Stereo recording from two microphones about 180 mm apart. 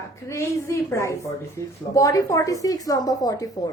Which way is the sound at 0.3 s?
15° left (ahead or behind).